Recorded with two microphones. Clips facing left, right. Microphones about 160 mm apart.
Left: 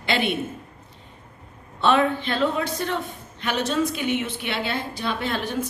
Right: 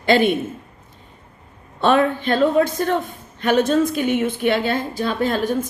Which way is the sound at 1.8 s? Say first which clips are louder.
Right 3 dB; 45° right (ahead or behind).